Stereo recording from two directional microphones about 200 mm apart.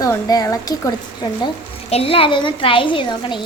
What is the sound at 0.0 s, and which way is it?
Speech, 15° left (ahead or behind).